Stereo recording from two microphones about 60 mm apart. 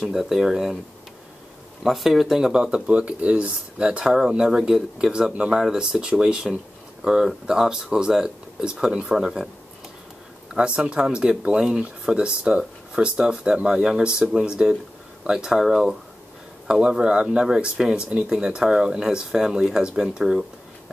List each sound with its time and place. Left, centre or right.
0.0 s speech: centre
1.8 s speech: centre
10.5 s speech: centre